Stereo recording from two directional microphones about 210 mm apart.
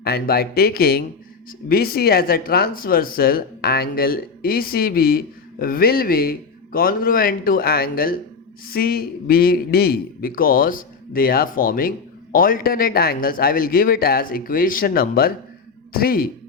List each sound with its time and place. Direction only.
0.0 s a man's voice: 50° left (ahead or behind)